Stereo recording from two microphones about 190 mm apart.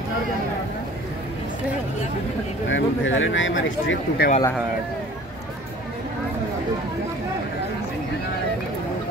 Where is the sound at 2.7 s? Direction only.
90° left.